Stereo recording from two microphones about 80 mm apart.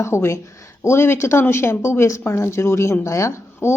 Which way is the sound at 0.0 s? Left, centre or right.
Left.